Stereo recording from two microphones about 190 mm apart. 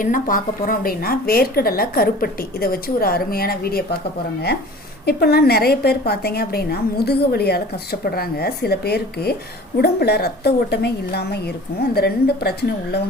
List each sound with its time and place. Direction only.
0.0 s a woman's voice: 45° left (ahead or behind)
5.0 s a woman's voice: 55° left (ahead or behind)